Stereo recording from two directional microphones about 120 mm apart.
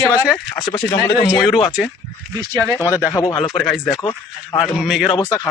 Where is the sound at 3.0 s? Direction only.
25° left (ahead or behind).